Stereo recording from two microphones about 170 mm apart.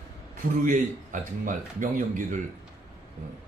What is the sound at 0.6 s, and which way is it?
A man's voice, 50° right (ahead or behind).